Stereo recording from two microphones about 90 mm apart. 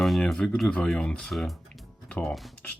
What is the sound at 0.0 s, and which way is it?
Speech, centre (ahead or behind).